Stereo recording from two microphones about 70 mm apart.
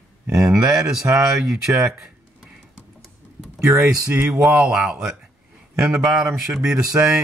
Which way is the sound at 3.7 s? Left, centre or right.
Right.